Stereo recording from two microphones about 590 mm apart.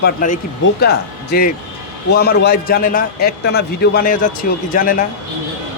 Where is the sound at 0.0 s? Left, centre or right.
Centre.